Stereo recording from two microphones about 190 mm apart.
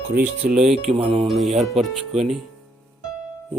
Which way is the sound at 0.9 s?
30° right (ahead or behind).